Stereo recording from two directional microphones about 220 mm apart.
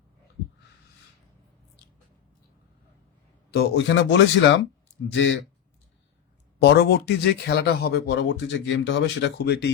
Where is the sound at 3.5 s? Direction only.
50° left (ahead or behind).